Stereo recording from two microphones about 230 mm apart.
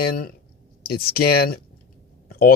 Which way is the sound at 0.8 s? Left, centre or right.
Left.